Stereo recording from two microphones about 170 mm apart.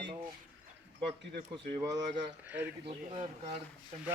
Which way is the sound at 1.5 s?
20° right (ahead or behind).